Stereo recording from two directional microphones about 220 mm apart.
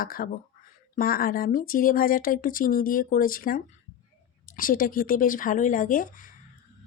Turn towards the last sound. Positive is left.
turn(degrees=40)  # may be behind; listen again after turning